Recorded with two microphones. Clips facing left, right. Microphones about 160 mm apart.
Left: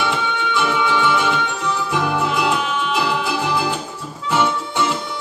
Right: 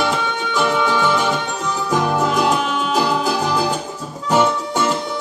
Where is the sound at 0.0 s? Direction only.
40° right (ahead or behind).